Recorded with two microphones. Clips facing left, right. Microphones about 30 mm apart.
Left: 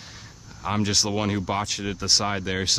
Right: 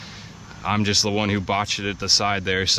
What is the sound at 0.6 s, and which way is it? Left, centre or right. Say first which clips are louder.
Speech: right 3 dB; right.